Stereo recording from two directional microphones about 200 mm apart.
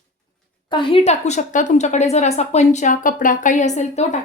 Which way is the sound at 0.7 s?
25° left (ahead or behind).